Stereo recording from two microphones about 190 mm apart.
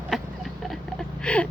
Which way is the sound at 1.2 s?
5° left (ahead or behind).